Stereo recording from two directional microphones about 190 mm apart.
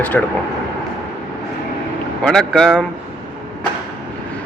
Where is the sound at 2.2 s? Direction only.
5° left (ahead or behind).